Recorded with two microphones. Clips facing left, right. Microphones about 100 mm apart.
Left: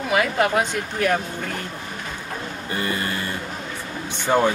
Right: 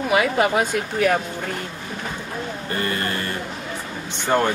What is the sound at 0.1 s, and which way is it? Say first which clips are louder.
Speech: right 1 dB; 5° right (ahead or behind).